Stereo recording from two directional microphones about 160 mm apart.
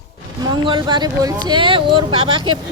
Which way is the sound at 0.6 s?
30° right (ahead or behind).